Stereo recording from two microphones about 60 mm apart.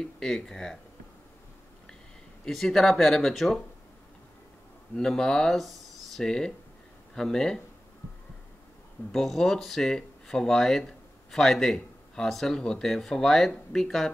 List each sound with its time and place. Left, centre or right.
0.0 s speech: centre
2.4 s speech: centre
4.9 s speech: centre
9.1 s speech: centre